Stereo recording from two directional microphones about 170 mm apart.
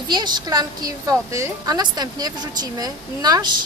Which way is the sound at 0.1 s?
25° right (ahead or behind).